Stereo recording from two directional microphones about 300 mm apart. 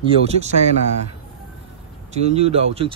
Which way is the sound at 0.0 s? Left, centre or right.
Centre.